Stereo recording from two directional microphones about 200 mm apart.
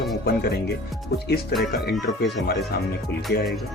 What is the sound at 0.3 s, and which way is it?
Speech, 50° left (ahead or behind).